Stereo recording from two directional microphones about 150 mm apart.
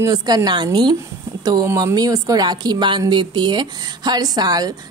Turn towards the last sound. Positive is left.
turn(degrees=-25)  # may be behind; listen again after turning